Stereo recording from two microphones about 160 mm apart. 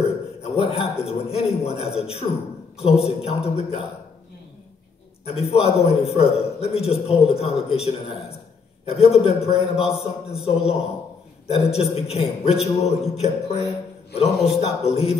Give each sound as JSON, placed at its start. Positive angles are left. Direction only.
{"t": 0.4, "sound": "a man's voice", "side_deg": 40}
{"t": 5.2, "sound": "a man's voice", "side_deg": 40}
{"t": 9.8, "sound": "a man's voice", "side_deg": -5}
{"t": 11.4, "sound": "a man's voice", "side_deg": 40}